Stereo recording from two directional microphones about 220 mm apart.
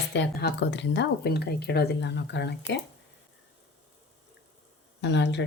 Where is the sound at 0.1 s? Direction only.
50° left (ahead or behind).